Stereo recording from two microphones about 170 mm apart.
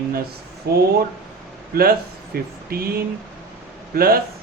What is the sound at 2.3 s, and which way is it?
A man's voice, 60° right (ahead or behind).